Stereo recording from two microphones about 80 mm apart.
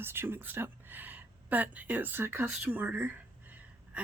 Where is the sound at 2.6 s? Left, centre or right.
Centre.